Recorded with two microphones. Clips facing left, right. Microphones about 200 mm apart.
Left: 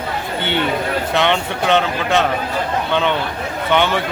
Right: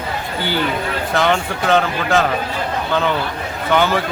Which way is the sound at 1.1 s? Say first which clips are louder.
Right 2 dB; centre (ahead or behind).